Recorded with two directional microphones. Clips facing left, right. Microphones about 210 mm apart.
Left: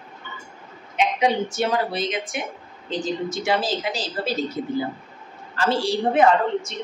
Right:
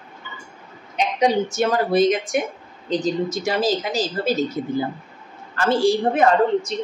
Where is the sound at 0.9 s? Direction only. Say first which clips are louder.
Right 2 dB; 40° right (ahead or behind).